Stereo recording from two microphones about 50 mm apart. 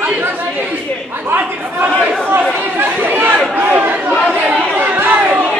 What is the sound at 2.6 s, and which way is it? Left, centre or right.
Chatter, right.